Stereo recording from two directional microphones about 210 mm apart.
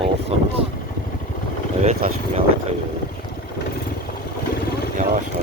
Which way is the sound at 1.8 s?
30° right (ahead or behind).